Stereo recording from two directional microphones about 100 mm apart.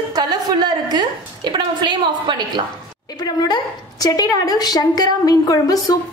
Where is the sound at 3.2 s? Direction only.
45° left (ahead or behind).